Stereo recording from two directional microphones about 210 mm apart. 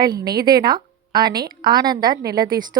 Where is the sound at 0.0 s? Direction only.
20° right (ahead or behind).